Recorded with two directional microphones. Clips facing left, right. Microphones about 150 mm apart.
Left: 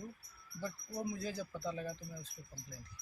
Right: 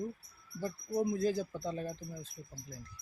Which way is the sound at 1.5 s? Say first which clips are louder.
Right 3 dB; 30° right (ahead or behind).